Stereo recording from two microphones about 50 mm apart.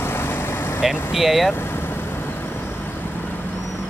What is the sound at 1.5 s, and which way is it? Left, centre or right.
Vehicle, left.